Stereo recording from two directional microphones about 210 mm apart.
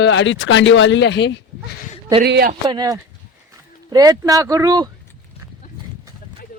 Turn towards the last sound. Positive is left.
turn(degrees=-15)  # may be behind; listen again after turning